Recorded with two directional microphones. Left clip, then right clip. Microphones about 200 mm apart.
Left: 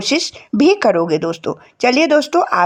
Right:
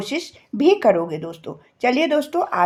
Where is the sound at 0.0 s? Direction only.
35° left (ahead or behind).